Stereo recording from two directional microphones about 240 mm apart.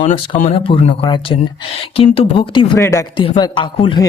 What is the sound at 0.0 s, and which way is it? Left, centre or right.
Speech, left.